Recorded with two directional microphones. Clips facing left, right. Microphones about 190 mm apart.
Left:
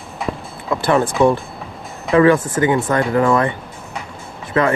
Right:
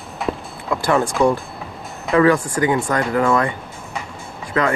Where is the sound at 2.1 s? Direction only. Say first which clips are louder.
Left 2 dB; 25° left (ahead or behind).